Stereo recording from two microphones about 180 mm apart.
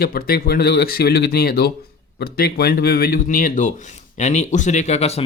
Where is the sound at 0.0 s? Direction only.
55° left (ahead or behind).